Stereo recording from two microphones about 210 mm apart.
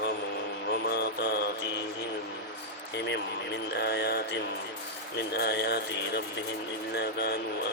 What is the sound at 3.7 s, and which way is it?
Speech, 55° left (ahead or behind).